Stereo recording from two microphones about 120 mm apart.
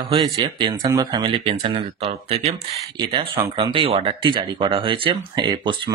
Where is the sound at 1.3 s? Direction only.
50° right (ahead or behind).